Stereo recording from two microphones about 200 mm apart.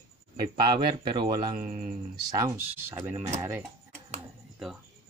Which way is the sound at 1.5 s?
40° right (ahead or behind).